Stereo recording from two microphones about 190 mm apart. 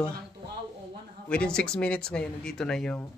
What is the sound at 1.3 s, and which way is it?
Speech, 5° left (ahead or behind).